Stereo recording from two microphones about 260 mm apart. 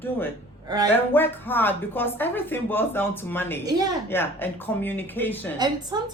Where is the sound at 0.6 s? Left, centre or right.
Centre.